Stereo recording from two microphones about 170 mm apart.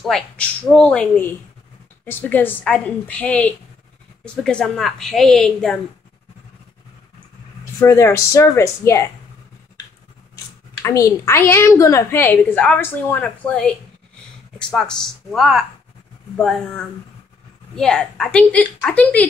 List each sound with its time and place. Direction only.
0.0 s a woman's voice: 5° left (ahead or behind)
7.8 s a woman's voice: 15° left (ahead or behind)
10.8 s a woman's voice: 20° left (ahead or behind)